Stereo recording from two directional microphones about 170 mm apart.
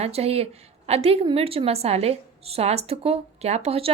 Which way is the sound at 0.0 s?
35° right (ahead or behind).